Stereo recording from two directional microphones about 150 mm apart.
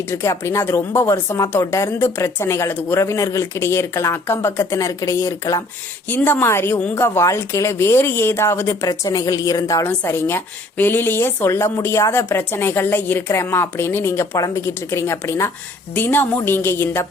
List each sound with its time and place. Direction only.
0.1 s speech: 20° left (ahead or behind)